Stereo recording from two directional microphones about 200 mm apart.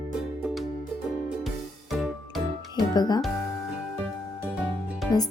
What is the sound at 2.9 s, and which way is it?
Speech, 20° left (ahead or behind).